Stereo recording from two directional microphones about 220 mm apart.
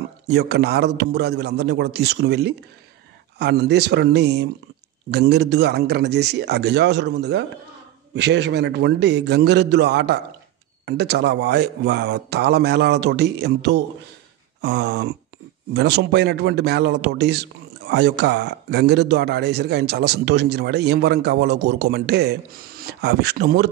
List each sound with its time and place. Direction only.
0.3 s a man's voice: 50° right (ahead or behind)